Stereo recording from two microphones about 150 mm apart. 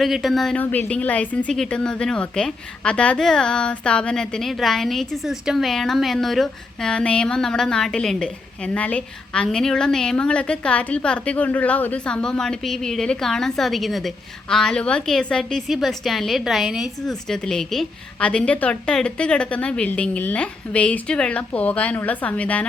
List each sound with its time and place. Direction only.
0.0 s a woman's voice: centre (ahead or behind)